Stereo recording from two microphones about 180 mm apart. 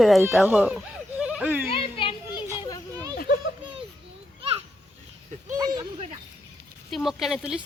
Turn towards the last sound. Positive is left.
turn(degrees=-5)  # may be behind; listen again after turning